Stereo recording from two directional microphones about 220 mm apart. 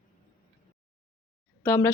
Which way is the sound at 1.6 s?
10° left (ahead or behind).